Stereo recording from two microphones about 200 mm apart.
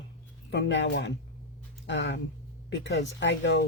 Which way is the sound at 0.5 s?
65° left (ahead or behind).